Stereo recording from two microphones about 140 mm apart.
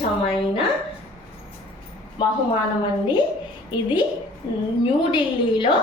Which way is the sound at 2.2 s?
35° left (ahead or behind).